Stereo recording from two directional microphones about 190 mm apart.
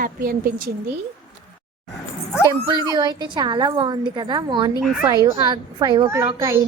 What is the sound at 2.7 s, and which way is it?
A woman's voice, 20° right (ahead or behind).